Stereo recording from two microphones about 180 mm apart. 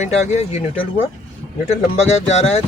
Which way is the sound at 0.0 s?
35° left (ahead or behind).